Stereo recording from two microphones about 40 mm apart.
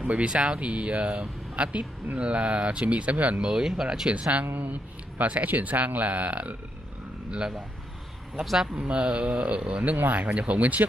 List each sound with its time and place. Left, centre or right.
0.1 s speech: right
3.3 s speech: centre
4.1 s speech: right
7.2 s a man's voice: right
8.7 s speech: right
9.8 s speech: right